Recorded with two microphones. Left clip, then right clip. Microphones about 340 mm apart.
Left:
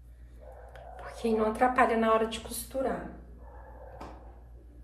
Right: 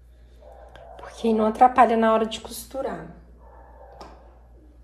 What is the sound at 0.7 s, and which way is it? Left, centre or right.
A woman's voice, centre.